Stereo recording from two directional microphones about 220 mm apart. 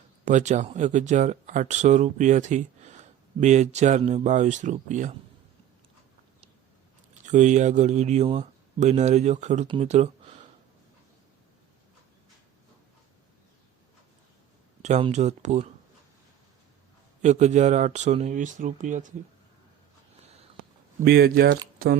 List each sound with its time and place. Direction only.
0.3 s speech: 35° right (ahead or behind)
7.3 s speech: 35° right (ahead or behind)
14.8 s speech: 30° right (ahead or behind)
17.2 s speech: 30° right (ahead or behind)
21.0 s speech: 45° right (ahead or behind)